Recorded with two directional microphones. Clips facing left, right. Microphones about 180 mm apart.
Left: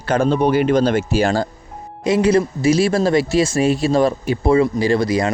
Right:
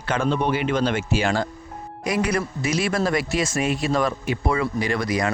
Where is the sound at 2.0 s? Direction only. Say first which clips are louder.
Left 8 dB; 25° left (ahead or behind).